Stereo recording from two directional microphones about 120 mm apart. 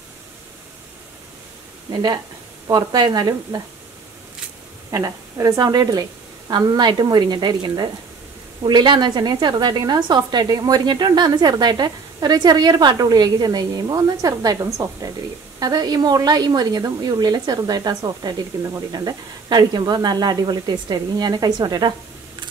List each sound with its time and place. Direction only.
1.9 s a woman's voice: 35° right (ahead or behind)
4.9 s a woman's voice: 25° right (ahead or behind)